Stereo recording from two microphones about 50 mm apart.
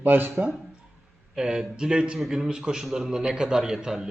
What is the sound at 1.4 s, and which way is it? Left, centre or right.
A man's voice, centre.